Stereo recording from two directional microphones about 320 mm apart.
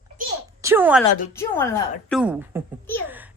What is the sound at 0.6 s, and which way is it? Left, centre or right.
Speech, centre.